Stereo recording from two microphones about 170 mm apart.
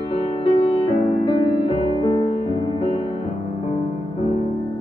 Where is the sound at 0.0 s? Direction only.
35° left (ahead or behind).